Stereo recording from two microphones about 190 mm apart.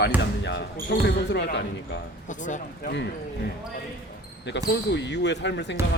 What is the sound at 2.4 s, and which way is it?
Speech, 40° left (ahead or behind).